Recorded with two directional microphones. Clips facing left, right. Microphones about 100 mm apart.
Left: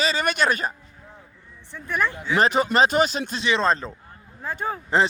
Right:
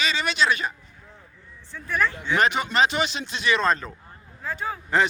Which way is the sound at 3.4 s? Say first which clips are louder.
Even; 25° left (ahead or behind).